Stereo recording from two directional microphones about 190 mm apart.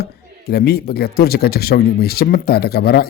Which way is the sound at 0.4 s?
55° left (ahead or behind).